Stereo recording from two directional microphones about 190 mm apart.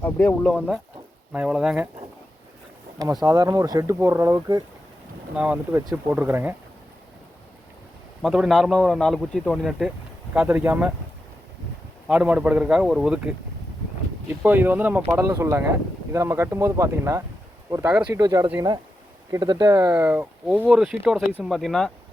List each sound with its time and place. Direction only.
0.0 s speech: 5° left (ahead or behind)
1.3 s a man's voice: 5° right (ahead or behind)
3.0 s speech: 20° right (ahead or behind)
8.2 s a man's voice: centre (ahead or behind)
12.0 s a man's voice: 5° right (ahead or behind)
18.2 s a man's voice: 20° right (ahead or behind); by 21.9 s centre (ahead or behind)